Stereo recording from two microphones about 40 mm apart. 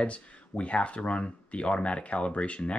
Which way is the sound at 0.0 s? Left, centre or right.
Left.